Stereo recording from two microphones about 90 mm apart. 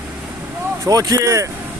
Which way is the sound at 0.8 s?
40° right (ahead or behind).